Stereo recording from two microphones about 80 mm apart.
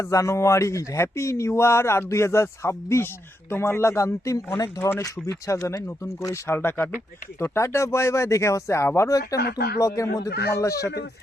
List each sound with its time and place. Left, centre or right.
0.0 s speech: left